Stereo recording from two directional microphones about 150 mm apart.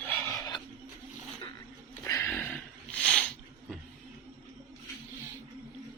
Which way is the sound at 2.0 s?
15° left (ahead or behind).